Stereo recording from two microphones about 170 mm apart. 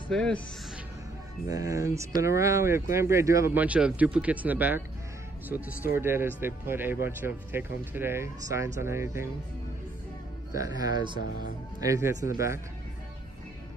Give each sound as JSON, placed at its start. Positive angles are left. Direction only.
{"t": 0.1, "sound": "speech", "side_deg": 5}
{"t": 1.5, "sound": "speech", "side_deg": -20}
{"t": 10.5, "sound": "speech", "side_deg": -20}